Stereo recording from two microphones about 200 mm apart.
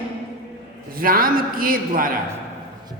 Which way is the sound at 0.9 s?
45° right (ahead or behind).